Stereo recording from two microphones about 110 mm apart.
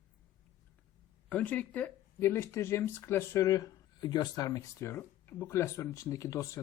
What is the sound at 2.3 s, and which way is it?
Speech, 25° left (ahead or behind).